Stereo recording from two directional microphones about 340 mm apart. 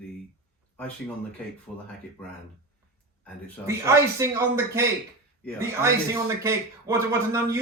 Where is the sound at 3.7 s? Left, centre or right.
Centre.